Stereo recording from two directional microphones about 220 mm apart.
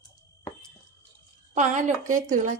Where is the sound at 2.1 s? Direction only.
35° right (ahead or behind).